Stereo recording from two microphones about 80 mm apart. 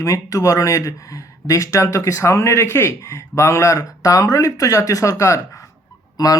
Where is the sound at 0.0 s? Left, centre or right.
Left.